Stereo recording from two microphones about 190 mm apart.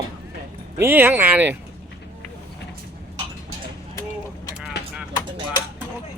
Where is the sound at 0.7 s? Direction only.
10° right (ahead or behind).